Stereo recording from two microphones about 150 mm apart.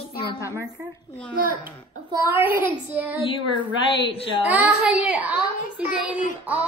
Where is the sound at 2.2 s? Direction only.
15° right (ahead or behind).